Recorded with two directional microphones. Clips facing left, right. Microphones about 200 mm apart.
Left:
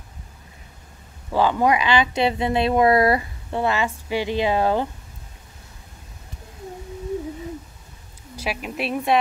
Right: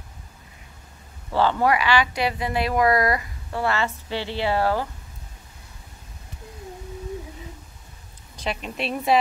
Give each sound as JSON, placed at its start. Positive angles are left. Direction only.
{"t": 1.3, "sound": "speech", "side_deg": 15}
{"t": 8.4, "sound": "speech", "side_deg": 5}